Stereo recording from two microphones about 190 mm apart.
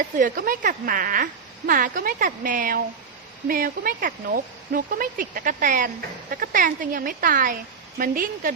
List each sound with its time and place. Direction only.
0.0 s speech: 45° right (ahead or behind)